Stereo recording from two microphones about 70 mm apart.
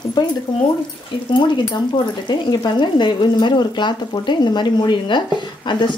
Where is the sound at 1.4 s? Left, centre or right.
Left.